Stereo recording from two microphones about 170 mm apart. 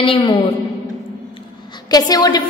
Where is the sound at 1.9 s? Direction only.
25° left (ahead or behind).